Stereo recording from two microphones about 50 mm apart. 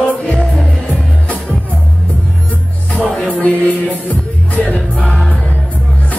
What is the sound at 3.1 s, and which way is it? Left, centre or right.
Music, left.